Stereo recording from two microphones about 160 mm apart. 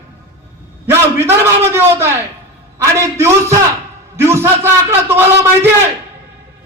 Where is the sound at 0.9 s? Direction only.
15° right (ahead or behind).